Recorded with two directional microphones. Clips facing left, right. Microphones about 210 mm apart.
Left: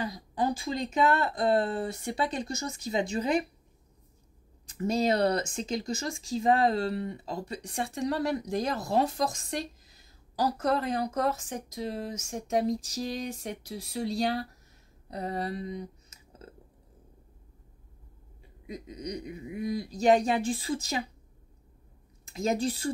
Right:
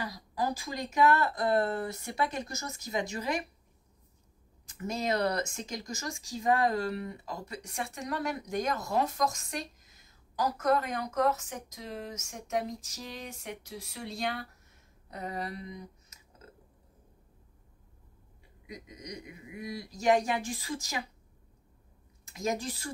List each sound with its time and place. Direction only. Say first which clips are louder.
0.0 s speech: left 4 dB; 25° left (ahead or behind)
4.6 s speech: left 6 dB; 30° left (ahead or behind)
18.7 s speech: left 7 dB; 30° left (ahead or behind)
22.3 s speech: left 5 dB; 30° left (ahead or behind)